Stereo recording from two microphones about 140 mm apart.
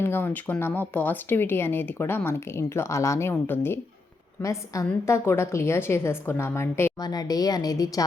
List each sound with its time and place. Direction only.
0.0 s a woman's voice: 15° left (ahead or behind)